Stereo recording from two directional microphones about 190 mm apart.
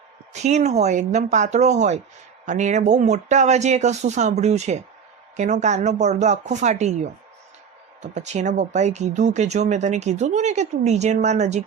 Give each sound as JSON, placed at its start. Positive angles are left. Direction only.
{"t": 0.4, "sound": "speech", "side_deg": -35}